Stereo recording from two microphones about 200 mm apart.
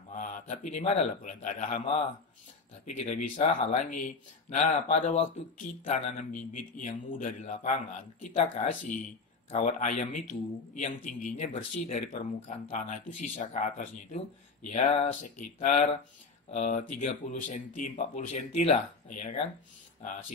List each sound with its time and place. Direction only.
0.1 s a man's voice: 40° left (ahead or behind)
2.8 s speech: 40° left (ahead or behind)